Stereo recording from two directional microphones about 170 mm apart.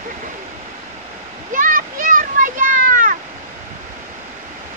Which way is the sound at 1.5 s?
50° right (ahead or behind).